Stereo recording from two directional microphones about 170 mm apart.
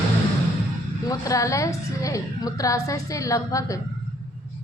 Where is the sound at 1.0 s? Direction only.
20° left (ahead or behind).